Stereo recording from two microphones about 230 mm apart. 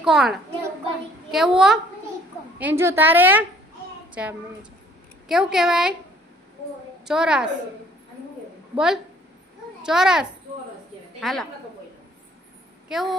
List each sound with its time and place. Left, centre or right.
0.0 s a woman's voice: centre
7.0 s a woman's voice: centre
8.7 s a woman's voice: centre
12.9 s a woman's voice: centre